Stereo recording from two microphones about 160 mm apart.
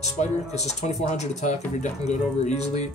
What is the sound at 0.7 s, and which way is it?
Speech, 45° left (ahead or behind).